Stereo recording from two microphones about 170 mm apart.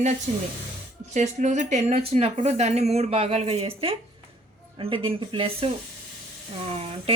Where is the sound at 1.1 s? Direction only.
45° right (ahead or behind).